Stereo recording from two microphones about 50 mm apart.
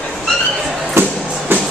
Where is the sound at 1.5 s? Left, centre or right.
Right.